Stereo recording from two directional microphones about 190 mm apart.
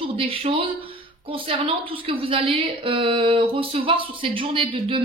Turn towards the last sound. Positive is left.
turn(degrees=-25)  # may be behind; listen again after turning